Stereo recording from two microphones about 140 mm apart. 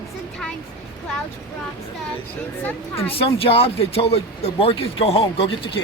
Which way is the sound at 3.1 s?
40° left (ahead or behind).